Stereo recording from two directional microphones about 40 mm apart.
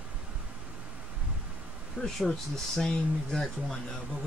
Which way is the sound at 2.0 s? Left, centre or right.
Centre.